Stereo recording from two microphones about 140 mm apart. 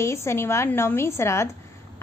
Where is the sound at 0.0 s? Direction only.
20° left (ahead or behind).